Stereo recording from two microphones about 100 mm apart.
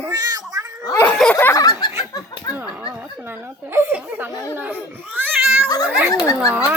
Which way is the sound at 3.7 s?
20° right (ahead or behind).